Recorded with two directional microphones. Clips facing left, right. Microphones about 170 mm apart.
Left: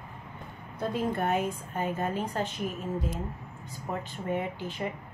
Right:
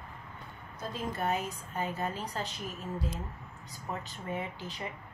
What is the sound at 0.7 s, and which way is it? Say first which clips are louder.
A woman's voice: left 7 dB; 60° left (ahead or behind).